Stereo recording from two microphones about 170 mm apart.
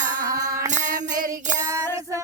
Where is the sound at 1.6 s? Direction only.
20° right (ahead or behind).